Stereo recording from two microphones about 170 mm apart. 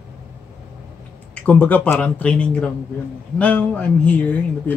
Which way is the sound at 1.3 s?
10° left (ahead or behind).